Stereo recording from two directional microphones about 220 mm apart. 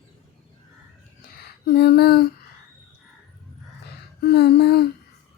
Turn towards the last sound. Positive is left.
turn(degrees=45)  # may be behind; listen again after turning